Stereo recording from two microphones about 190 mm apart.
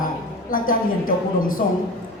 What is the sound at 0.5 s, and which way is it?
Speech, 45° left (ahead or behind).